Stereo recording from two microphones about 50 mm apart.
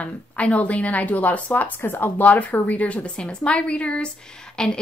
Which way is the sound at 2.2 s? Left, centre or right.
Left.